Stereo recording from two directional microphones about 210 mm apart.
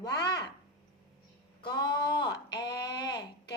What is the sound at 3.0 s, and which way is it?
Speech, 20° left (ahead or behind).